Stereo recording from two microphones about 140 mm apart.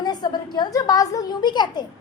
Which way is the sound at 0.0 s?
30° left (ahead or behind).